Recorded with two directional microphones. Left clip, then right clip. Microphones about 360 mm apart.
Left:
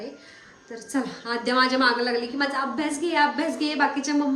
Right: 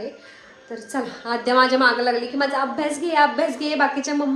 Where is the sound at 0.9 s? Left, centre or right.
Centre.